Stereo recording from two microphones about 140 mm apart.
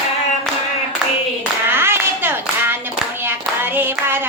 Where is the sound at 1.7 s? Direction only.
15° right (ahead or behind).